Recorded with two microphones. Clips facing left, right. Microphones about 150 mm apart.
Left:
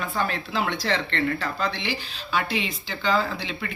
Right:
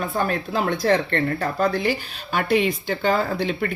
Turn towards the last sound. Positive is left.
turn(degrees=-45)  # may be behind; listen again after turning